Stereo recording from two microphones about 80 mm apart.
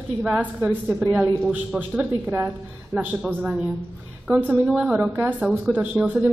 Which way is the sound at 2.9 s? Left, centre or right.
Centre.